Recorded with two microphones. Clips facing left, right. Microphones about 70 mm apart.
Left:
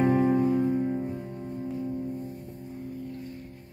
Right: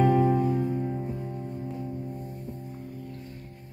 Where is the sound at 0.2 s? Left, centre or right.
Left.